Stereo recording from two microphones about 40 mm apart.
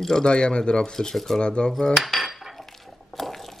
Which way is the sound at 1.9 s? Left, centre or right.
Centre.